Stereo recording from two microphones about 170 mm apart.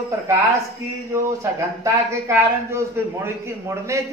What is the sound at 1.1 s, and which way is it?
Speech, 15° right (ahead or behind).